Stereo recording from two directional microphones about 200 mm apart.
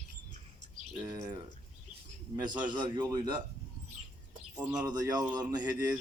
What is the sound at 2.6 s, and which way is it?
Speech, 20° right (ahead or behind).